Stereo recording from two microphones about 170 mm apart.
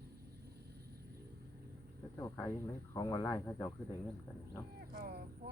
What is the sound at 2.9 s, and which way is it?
Speech, 20° left (ahead or behind).